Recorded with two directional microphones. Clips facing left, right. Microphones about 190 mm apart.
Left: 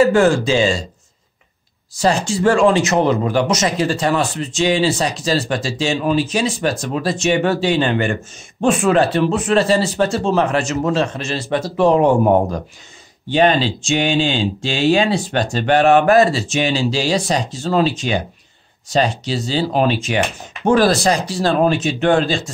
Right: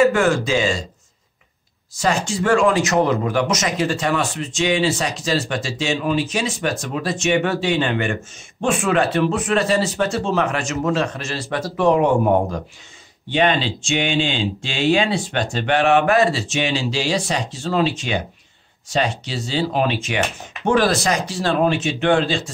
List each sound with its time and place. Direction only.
0.0 s speech: 30° left (ahead or behind)
2.0 s speech: 35° left (ahead or behind)
13.3 s speech: 40° left (ahead or behind)